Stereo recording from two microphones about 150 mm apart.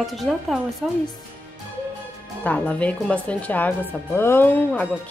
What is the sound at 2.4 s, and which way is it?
Speech, 10° left (ahead or behind).